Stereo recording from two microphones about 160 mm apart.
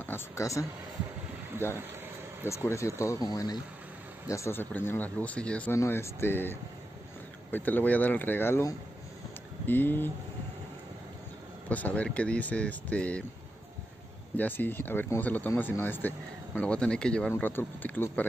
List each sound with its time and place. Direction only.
0.0 s speech: 15° left (ahead or behind)
2.4 s speech: 15° left (ahead or behind)
11.7 s speech: 10° left (ahead or behind)
14.3 s speech: 10° left (ahead or behind)